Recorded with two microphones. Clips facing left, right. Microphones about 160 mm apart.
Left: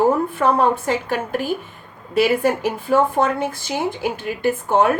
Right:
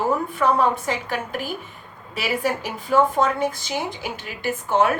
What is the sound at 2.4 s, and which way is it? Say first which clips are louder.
Speech: left 5 dB; 50° left (ahead or behind).